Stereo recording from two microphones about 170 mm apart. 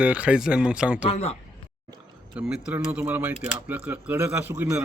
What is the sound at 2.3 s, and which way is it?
Speech, 5° right (ahead or behind).